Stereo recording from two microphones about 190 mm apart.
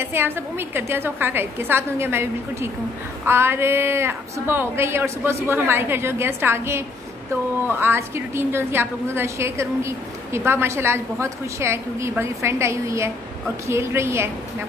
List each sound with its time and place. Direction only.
0.0 s a woman's voice: 10° right (ahead or behind)